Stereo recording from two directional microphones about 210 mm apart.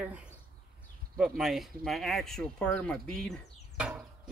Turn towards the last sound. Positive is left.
turn(degrees=-5)  # may be behind; listen again after turning